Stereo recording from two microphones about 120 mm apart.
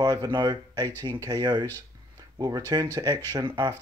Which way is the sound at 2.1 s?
35° right (ahead or behind).